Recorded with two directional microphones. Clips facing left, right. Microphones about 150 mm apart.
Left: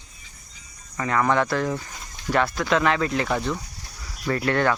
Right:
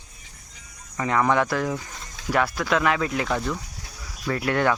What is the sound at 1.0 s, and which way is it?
Speech, 15° right (ahead or behind).